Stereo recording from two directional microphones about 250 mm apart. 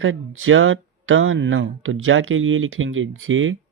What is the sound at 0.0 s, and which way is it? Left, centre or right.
Speech, right.